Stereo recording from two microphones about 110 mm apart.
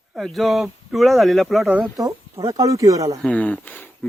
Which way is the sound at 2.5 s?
30° right (ahead or behind).